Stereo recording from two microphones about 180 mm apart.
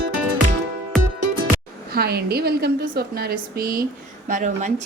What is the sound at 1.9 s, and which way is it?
A woman's voice, 60° right (ahead or behind).